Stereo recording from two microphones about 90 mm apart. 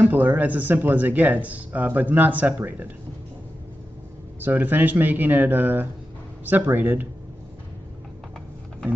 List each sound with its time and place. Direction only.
0.0 s speech: 20° right (ahead or behind)
4.4 s speech: 20° right (ahead or behind)